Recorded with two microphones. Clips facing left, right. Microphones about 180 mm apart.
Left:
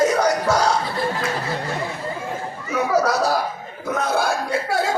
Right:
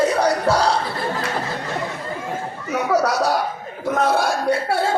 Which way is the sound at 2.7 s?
75° right (ahead or behind).